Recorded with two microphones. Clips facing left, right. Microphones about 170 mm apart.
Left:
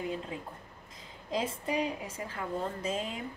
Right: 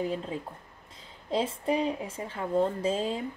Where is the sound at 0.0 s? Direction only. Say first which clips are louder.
Right 5 dB; 30° right (ahead or behind).